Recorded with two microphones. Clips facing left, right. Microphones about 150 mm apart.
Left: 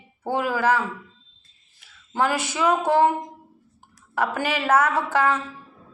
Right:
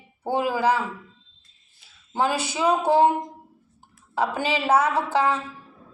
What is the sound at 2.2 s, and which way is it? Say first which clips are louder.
Speech: left 1 dB; 15° right (ahead or behind).